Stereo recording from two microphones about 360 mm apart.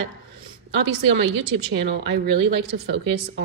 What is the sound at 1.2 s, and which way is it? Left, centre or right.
A woman's voice, right.